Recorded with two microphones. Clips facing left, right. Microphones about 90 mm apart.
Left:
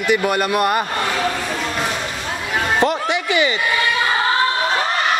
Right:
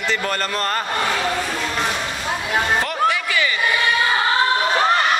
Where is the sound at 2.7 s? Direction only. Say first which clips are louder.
Left 2 dB; 20° left (ahead or behind).